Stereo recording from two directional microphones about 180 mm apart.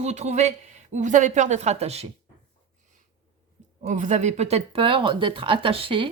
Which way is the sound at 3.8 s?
40° right (ahead or behind).